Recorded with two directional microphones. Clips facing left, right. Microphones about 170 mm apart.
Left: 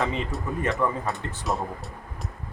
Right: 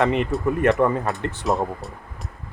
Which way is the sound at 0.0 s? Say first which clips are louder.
Right 8 dB; 65° right (ahead or behind).